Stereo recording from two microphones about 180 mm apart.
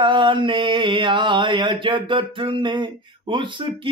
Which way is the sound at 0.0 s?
25° right (ahead or behind).